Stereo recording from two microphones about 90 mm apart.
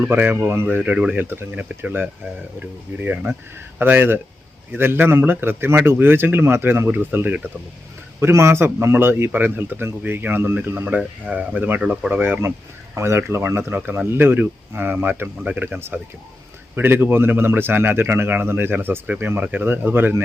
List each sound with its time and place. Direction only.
0.0 s speech: 25° right (ahead or behind)
0.8 s speech: 15° right (ahead or behind)